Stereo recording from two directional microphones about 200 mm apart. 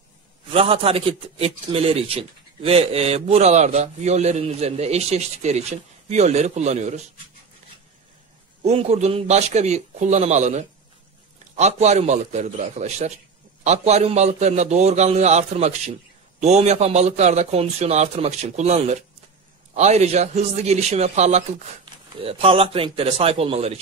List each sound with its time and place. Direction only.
0.5 s a man's voice: 25° right (ahead or behind)
8.6 s a man's voice: 30° right (ahead or behind)